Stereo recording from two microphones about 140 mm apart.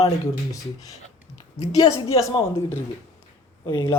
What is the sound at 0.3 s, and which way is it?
Speech, 25° left (ahead or behind).